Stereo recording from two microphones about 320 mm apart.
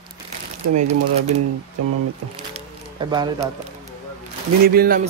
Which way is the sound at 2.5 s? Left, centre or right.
Centre.